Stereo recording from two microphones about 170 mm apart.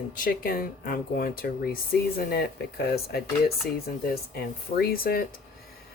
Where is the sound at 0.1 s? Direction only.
55° left (ahead or behind).